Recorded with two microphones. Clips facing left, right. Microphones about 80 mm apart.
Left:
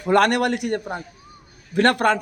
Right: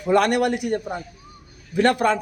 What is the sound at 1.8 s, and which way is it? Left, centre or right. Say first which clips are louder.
Speech: left 1 dB; left.